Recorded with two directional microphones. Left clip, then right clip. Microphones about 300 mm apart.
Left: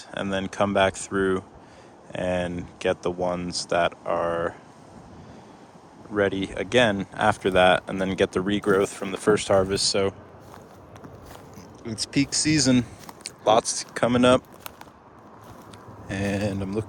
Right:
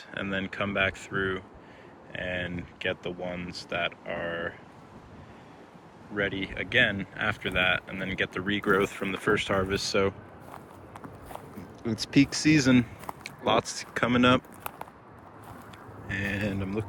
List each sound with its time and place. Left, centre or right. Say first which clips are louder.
0.1 s speech: left 4 dB; centre
2.1 s speech: left 6 dB; left
2.5 s speech: left 6 dB; centre
4.0 s speech: left 8 dB; left
6.1 s speech: left 6 dB; centre
11.8 s speech: right 1 dB; centre
16.0 s speech: left 3 dB; centre